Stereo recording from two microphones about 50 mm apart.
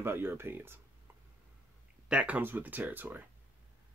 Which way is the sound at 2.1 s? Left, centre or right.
Right.